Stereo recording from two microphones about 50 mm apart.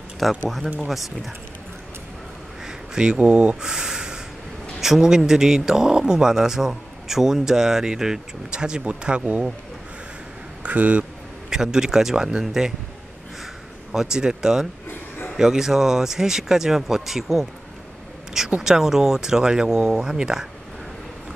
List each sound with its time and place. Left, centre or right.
0.2 s speech: centre
2.6 s a sound: centre
3.2 s speech: right
3.6 s speech: centre
10.6 s a sound: right
11.5 s speech: centre
13.9 s speech: centre
14.9 s a sound: left
15.3 s speech: centre
18.6 s speech: centre